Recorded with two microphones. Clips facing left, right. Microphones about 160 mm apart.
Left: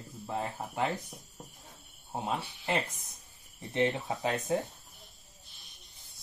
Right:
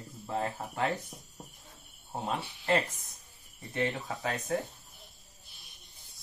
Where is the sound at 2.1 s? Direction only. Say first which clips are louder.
Even; 15° left (ahead or behind).